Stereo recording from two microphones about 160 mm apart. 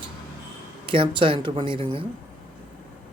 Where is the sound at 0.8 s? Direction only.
35° right (ahead or behind).